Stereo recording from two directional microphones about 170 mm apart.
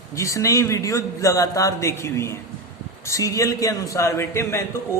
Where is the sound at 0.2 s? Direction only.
20° left (ahead or behind).